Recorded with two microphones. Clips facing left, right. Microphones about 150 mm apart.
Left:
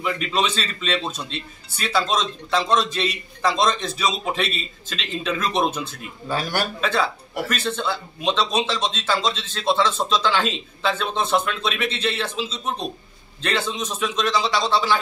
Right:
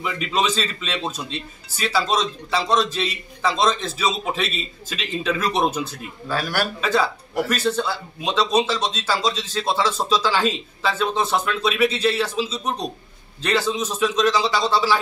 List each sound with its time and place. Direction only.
0.0 s speech: centre (ahead or behind)
6.2 s a man's voice: 20° left (ahead or behind)
6.8 s a man's voice: 5° right (ahead or behind)
13.4 s speech: 5° right (ahead or behind)